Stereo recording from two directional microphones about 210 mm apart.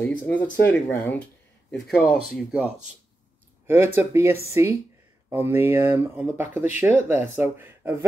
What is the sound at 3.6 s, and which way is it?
Speech, 10° right (ahead or behind).